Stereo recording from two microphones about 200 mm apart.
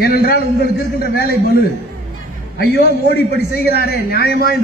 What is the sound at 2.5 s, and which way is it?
A man's voice, 50° left (ahead or behind).